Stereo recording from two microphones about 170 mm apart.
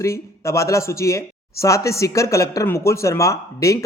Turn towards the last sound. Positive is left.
turn(degrees=20)  # may be behind; listen again after turning